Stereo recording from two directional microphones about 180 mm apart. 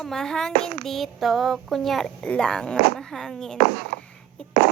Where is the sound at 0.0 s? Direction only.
Centre (ahead or behind).